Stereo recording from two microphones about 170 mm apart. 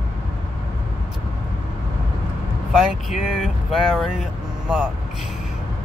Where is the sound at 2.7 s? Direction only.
Centre (ahead or behind).